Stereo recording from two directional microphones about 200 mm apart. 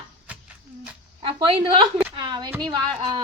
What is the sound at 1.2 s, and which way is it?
A woman's voice, 25° right (ahead or behind).